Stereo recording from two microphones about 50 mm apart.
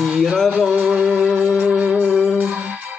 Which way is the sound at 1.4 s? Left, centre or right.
Right.